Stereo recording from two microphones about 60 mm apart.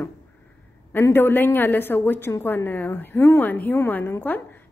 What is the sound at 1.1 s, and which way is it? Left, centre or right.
A woman's voice, left.